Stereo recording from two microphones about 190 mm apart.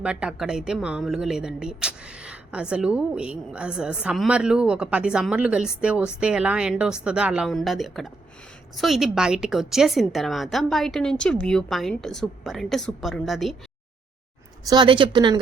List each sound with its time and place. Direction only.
0.0 s speech: 5° right (ahead or behind)
14.7 s speech: 25° right (ahead or behind)